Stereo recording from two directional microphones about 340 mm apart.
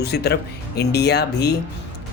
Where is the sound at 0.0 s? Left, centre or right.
Left.